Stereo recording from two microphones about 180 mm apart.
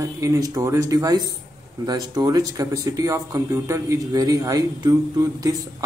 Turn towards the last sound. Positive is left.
turn(degrees=-20)  # may be behind; listen again after turning